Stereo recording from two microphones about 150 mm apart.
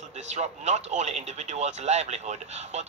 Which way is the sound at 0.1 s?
50° right (ahead or behind).